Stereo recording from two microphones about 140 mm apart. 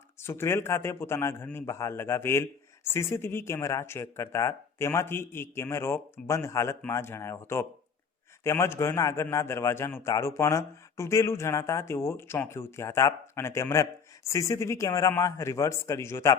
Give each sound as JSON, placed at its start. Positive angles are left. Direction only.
{"t": 0.2, "sound": "speech", "side_deg": 15}